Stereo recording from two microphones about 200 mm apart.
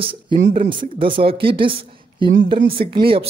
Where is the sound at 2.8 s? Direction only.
45° right (ahead or behind).